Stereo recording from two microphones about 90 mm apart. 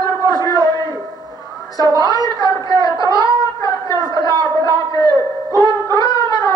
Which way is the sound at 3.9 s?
50° right (ahead or behind).